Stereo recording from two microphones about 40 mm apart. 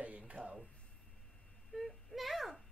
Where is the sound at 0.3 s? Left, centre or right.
Right.